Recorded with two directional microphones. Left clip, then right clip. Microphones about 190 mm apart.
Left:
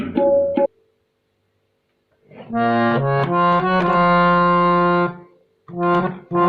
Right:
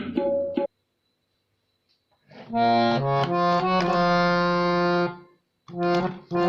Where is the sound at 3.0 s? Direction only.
10° right (ahead or behind).